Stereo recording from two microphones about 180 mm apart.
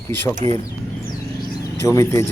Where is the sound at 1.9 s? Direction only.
15° left (ahead or behind).